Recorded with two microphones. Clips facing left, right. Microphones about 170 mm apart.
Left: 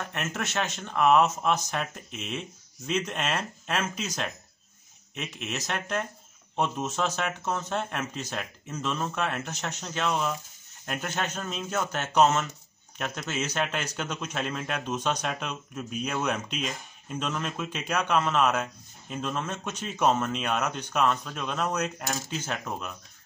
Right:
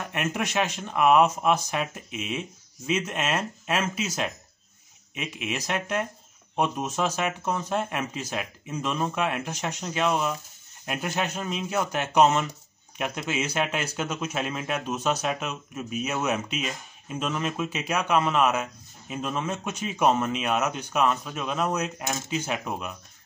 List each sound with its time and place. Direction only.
0.1 s a man's voice: 15° right (ahead or behind)